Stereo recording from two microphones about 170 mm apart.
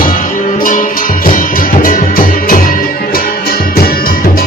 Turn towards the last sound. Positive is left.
turn(degrees=55)  # may be behind; listen again after turning